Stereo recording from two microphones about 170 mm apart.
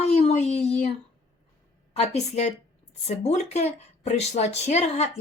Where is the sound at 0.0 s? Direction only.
40° left (ahead or behind).